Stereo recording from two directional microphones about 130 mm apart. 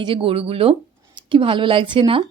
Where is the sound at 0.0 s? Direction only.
45° right (ahead or behind).